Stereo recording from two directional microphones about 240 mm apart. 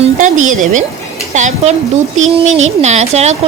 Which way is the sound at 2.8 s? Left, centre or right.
Right.